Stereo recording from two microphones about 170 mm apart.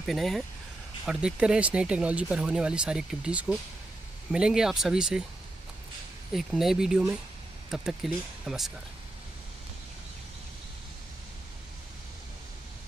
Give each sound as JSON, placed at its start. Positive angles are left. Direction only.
{"t": 0.0, "sound": "speech", "side_deg": 0}
{"t": 6.3, "sound": "speech", "side_deg": 0}